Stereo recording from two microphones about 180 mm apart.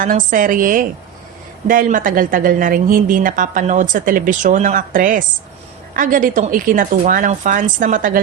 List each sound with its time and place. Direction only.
0.0 s a woman's voice: 50° right (ahead or behind)